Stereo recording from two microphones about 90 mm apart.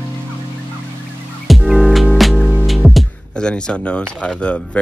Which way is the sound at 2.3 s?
15° right (ahead or behind).